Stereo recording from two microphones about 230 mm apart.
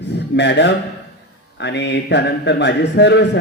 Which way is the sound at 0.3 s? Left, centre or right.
Left.